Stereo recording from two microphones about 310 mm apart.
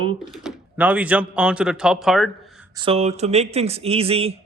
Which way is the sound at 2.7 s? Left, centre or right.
Centre.